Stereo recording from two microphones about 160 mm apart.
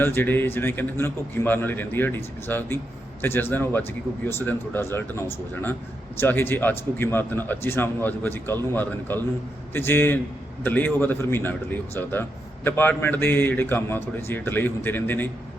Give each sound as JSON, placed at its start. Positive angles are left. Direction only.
{"t": 0.0, "sound": "a man's voice", "side_deg": 15}
{"t": 12.6, "sound": "a man's voice", "side_deg": 15}